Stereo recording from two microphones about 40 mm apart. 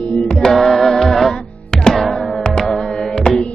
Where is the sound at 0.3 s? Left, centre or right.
Centre.